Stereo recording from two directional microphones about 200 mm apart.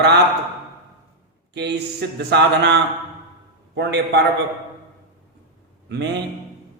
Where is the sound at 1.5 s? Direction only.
60° right (ahead or behind).